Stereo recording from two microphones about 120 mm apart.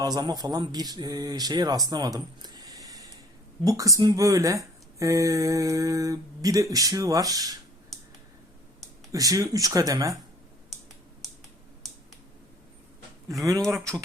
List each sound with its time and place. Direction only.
0.0 s a man's voice: 35° right (ahead or behind)
9.1 s speech: 30° right (ahead or behind)
13.7 s speech: 25° right (ahead or behind)